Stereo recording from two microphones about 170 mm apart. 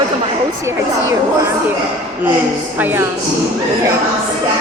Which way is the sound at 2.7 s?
10° right (ahead or behind).